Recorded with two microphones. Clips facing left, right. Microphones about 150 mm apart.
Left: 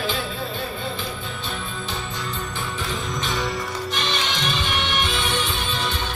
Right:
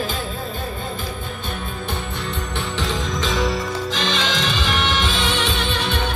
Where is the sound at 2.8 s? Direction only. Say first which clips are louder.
Right 5 dB; 90° right; by 6.0 s 70° right (ahead or behind).